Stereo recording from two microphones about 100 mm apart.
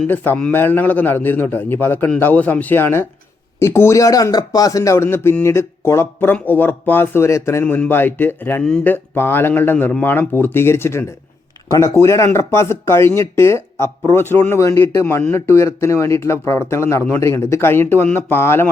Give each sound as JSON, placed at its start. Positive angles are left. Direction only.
{"t": 0.5, "sound": "speech", "side_deg": 20}
{"t": 7.6, "sound": "speech", "side_deg": 15}